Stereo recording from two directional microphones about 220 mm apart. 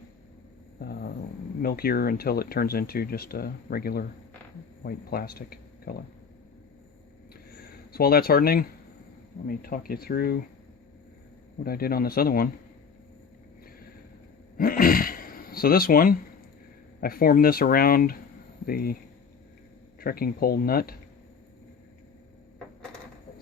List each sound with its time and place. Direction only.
0.8 s a man's voice: 40° left (ahead or behind)
7.5 s speech: 45° left (ahead or behind)
11.6 s speech: 45° left (ahead or behind)
14.6 s speech: 40° left (ahead or behind)
20.0 s speech: 40° left (ahead or behind)